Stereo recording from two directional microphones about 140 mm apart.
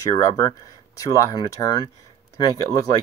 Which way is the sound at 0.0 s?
25° left (ahead or behind).